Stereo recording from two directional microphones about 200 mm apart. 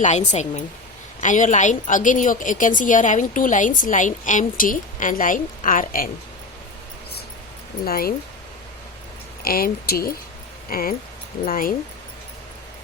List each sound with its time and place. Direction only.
0.0 s a woman's voice: 35° left (ahead or behind)
7.9 s speech: 50° left (ahead or behind)
9.4 s speech: 45° left (ahead or behind)